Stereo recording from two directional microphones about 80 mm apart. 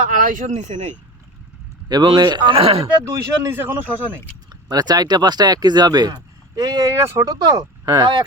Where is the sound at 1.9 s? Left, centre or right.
Right.